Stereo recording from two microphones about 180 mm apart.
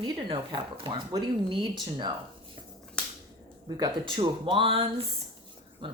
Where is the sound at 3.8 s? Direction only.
25° right (ahead or behind).